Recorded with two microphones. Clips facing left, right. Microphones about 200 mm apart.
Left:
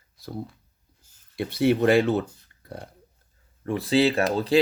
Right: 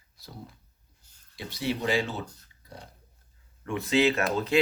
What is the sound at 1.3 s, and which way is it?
Speech, 60° left (ahead or behind).